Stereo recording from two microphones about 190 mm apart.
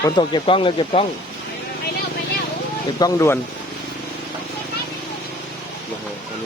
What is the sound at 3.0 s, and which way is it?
Speech, 15° left (ahead or behind).